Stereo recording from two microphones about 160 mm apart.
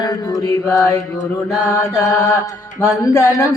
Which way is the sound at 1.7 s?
20° left (ahead or behind).